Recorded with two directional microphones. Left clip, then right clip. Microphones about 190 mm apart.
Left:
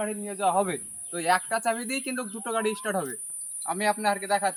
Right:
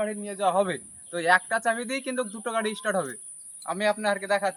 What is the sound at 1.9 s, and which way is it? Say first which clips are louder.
Speech: right 2 dB; 20° right (ahead or behind).